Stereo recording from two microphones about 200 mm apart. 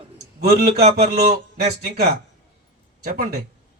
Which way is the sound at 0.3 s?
55° right (ahead or behind).